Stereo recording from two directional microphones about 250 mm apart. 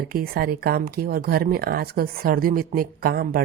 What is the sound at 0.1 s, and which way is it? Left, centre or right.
Speech, right.